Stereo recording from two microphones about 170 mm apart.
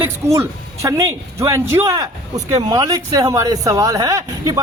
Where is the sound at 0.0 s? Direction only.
15° right (ahead or behind).